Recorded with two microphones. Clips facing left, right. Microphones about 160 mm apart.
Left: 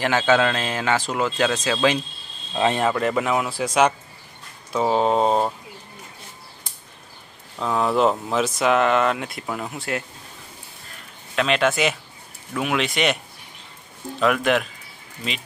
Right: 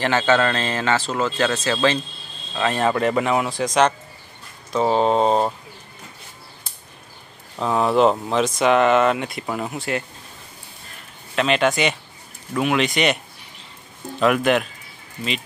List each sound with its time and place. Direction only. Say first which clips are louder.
0.0 s speech: even; 10° left (ahead or behind)
2.5 s speech: left 2 dB; 20° left (ahead or behind)
2.8 s speech: right 2 dB; centre (ahead or behind)
7.6 s speech: right 3 dB; 5° right (ahead or behind)
11.3 s speech: right 1 dB; centre (ahead or behind)
14.2 s speech: right 2 dB; centre (ahead or behind)